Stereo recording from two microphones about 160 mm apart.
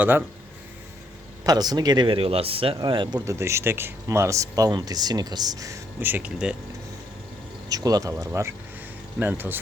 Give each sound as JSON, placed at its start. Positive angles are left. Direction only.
{"t": 1.5, "sound": "speech", "side_deg": -25}
{"t": 3.2, "sound": "speech", "side_deg": -15}
{"t": 7.7, "sound": "speech", "side_deg": -25}